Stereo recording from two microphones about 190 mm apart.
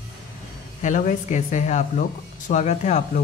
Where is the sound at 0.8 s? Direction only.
40° left (ahead or behind).